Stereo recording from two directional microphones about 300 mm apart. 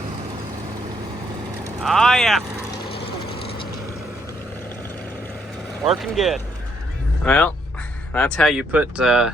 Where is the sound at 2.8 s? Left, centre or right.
Centre.